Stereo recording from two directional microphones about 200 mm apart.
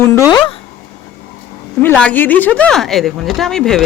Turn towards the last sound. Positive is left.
turn(degrees=0)  # may be behind; listen again after turning